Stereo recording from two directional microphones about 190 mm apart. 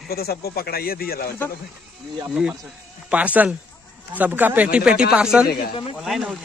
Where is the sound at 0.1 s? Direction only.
55° left (ahead or behind).